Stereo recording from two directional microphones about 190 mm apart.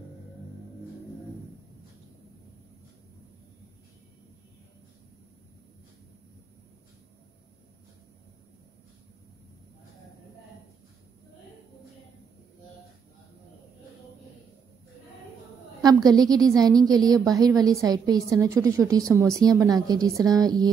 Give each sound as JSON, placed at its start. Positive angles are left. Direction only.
{"t": 15.8, "sound": "a woman's voice", "side_deg": -20}